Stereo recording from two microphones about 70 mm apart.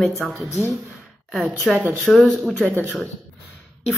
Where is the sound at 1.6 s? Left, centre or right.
Centre.